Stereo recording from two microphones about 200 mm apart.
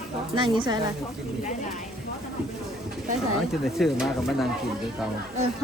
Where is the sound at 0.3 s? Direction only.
25° right (ahead or behind).